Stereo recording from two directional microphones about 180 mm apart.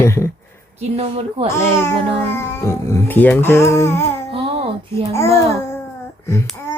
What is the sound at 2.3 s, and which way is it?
Speech, 15° left (ahead or behind).